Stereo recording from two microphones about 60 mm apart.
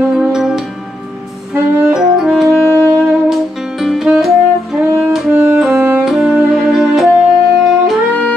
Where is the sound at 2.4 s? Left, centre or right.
Right.